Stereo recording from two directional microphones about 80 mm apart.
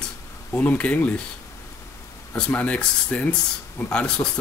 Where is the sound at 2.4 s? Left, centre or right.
Centre.